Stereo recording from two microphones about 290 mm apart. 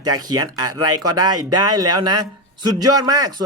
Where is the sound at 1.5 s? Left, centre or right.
Centre.